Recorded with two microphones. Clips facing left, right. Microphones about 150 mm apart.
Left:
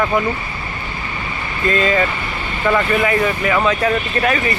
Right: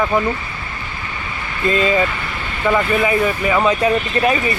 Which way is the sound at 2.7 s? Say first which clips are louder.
Even; 10° right (ahead or behind).